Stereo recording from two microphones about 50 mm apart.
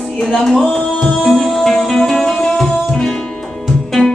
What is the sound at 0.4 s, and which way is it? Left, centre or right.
Music, centre.